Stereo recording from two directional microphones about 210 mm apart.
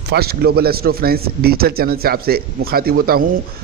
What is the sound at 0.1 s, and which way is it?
A man's voice, 50° right (ahead or behind).